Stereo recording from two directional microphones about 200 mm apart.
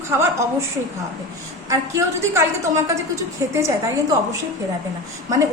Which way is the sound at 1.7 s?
15° right (ahead or behind).